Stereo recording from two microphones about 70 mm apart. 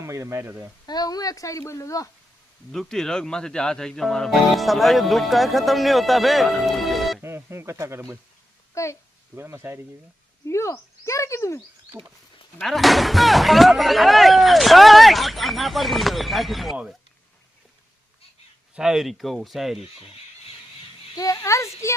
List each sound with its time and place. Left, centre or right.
0.0 s speech: right
0.9 s a woman's voice: left
2.7 s speech: centre
7.2 s speech: right
8.7 s a child's voice: left
9.3 s speech: right
10.4 s speech: left
12.6 s speech: centre
18.8 s speech: centre
21.2 s speech: left